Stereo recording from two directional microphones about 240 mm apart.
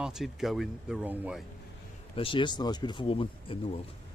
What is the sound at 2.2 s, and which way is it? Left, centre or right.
Speech, left.